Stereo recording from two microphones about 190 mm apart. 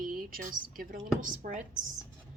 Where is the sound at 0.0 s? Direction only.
50° right (ahead or behind).